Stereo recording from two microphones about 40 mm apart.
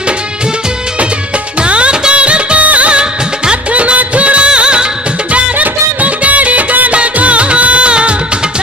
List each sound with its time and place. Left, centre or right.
1.6 s music of bollywood: right
5.3 s music: right